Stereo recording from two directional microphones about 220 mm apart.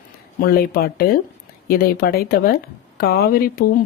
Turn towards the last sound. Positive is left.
turn(degrees=40)  # may be behind; listen again after turning